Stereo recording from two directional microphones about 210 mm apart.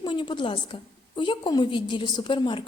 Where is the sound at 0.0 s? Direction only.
25° left (ahead or behind).